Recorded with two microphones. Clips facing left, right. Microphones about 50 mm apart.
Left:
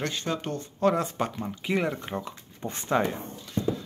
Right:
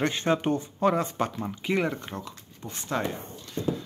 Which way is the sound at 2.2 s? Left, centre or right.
Left.